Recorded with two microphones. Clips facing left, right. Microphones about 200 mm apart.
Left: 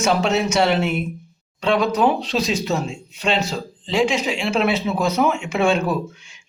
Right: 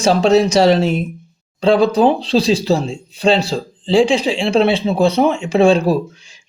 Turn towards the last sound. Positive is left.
turn(degrees=-35)  # may be behind; listen again after turning